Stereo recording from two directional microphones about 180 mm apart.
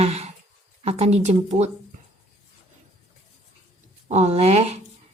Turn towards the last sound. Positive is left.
turn(degrees=-35)  # may be behind; listen again after turning